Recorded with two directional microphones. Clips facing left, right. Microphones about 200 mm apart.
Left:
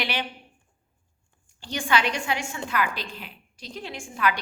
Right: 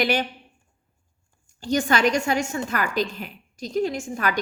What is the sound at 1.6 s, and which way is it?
A woman's voice, 40° right (ahead or behind).